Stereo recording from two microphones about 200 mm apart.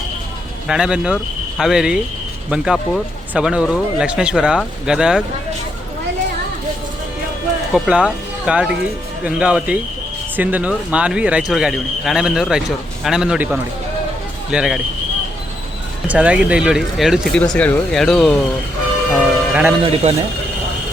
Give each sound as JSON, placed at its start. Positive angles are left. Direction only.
{"t": 0.7, "sound": "speech", "side_deg": -5}
{"t": 7.7, "sound": "speech", "side_deg": -5}
{"t": 16.0, "sound": "speech", "side_deg": -5}
{"t": 19.1, "sound": "a sound", "side_deg": -5}
{"t": 19.8, "sound": "speech", "side_deg": -30}